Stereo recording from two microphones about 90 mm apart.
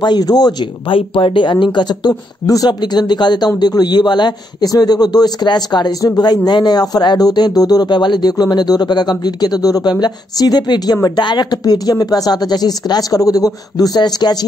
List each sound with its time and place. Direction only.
0.0 s speech: 50° left (ahead or behind)
0.8 s speech: 80° left; by 14.4 s 50° left (ahead or behind)